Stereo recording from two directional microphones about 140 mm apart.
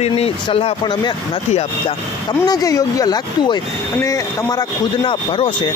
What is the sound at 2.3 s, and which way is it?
Speech, 25° left (ahead or behind).